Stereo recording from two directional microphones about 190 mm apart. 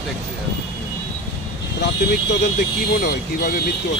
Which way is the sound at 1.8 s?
65° left (ahead or behind).